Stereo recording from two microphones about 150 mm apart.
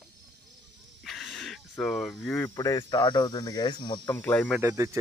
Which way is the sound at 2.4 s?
25° left (ahead or behind).